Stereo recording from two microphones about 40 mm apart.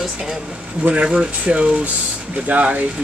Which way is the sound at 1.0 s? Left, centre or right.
Right.